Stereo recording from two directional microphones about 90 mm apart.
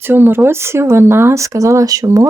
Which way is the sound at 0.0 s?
25° right (ahead or behind).